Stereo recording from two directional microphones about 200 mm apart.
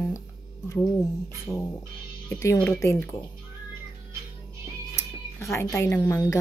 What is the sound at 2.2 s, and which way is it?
Speech, 15° left (ahead or behind).